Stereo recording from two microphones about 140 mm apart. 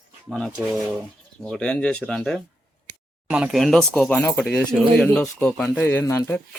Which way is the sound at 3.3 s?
5° right (ahead or behind).